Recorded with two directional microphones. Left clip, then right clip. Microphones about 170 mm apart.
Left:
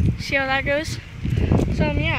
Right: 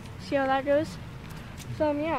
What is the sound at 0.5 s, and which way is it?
Speech, 10° left (ahead or behind).